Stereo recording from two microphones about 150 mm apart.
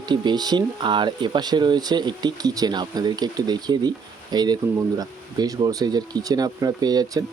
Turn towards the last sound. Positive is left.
turn(degrees=-25)  # may be behind; listen again after turning